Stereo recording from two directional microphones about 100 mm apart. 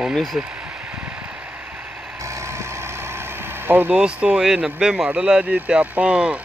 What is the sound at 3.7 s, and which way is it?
Speech, 20° right (ahead or behind).